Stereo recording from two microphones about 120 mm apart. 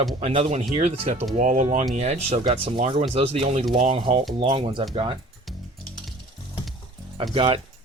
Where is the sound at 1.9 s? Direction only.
65° right (ahead or behind).